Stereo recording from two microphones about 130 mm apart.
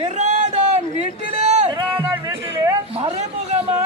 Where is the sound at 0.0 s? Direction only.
60° right (ahead or behind).